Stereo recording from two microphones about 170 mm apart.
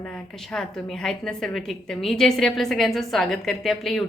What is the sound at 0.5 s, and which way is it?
A woman's voice, 5° left (ahead or behind).